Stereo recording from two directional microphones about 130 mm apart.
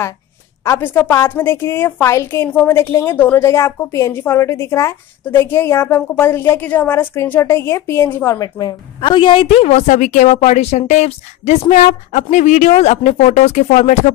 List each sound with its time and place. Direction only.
0.7 s a woman's voice: 15° left (ahead or behind)
8.4 s a woman's voice: 30° left (ahead or behind); by 13.9 s 65° left (ahead or behind)